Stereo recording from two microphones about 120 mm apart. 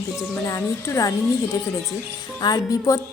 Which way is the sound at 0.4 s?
30° left (ahead or behind).